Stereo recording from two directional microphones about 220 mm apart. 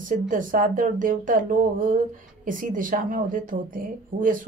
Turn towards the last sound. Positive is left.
turn(degrees=-40)  # may be behind; listen again after turning